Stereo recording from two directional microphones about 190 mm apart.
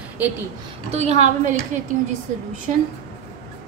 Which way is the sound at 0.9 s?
35° right (ahead or behind).